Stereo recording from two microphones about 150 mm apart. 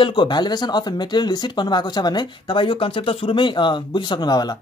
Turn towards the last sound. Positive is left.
turn(degrees=25)  # may be behind; listen again after turning